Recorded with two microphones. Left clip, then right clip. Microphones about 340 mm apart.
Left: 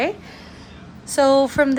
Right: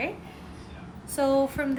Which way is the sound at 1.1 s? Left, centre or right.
Centre.